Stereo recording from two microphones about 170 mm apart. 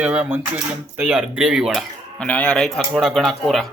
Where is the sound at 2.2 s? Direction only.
10° left (ahead or behind).